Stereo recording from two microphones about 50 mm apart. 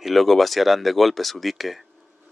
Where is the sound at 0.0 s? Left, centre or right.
Centre.